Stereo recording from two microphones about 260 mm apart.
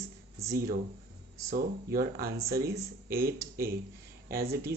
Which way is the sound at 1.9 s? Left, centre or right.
Right.